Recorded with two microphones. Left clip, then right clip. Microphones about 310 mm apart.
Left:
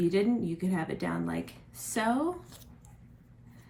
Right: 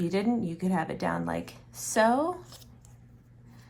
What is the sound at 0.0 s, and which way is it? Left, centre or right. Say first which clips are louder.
Speech: left 1 dB; centre.